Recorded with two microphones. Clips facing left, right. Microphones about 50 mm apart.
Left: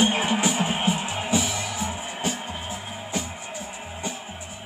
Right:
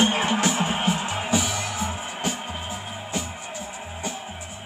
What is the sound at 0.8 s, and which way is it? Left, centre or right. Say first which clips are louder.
Music: right 1 dB; centre.